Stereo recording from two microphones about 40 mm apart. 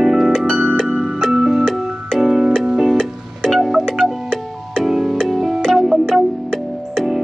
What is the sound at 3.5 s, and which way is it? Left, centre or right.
Wind chime, centre.